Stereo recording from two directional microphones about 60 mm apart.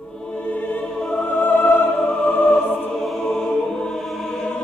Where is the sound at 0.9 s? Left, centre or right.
Centre.